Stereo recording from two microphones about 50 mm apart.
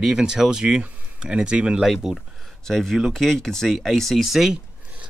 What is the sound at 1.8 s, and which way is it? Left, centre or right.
Speech, centre.